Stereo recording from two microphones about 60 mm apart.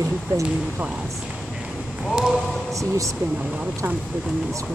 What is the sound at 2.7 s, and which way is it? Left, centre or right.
Speech, right.